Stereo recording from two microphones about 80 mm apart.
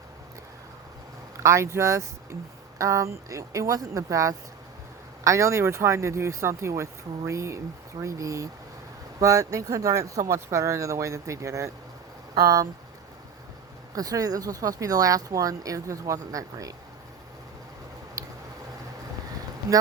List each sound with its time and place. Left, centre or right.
1.4 s speech: right
13.9 s speech: right